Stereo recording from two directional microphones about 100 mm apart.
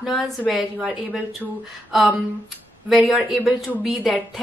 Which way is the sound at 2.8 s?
5° right (ahead or behind).